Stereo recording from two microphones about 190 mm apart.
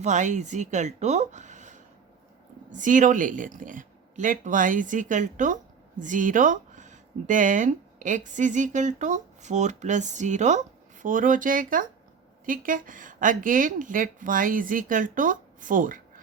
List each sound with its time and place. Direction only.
0.0 s speech: 40° right (ahead or behind)